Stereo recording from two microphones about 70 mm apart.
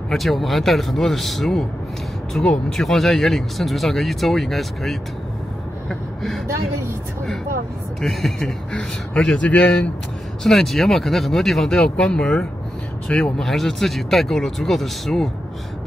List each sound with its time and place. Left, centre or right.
0.1 s speech: centre
5.9 s a sound: centre
8.0 s speech: centre
10.4 s speech: centre